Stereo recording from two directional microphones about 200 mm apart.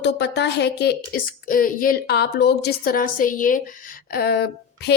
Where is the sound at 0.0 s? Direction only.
55° left (ahead or behind).